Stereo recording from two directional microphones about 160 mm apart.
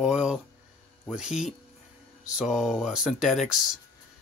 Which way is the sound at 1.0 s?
5° right (ahead or behind).